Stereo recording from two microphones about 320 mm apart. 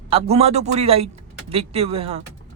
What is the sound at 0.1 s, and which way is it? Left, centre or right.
Speech, centre.